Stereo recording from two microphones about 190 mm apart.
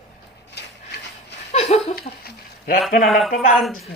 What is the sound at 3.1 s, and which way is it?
Speech, centre (ahead or behind).